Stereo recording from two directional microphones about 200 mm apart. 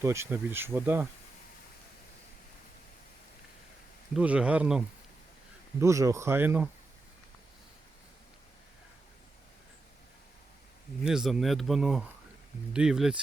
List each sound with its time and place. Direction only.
0.0 s speech: 15° right (ahead or behind)
4.1 s speech: 5° right (ahead or behind)
5.8 s speech: 15° right (ahead or behind)
11.0 s speech: 5° right (ahead or behind)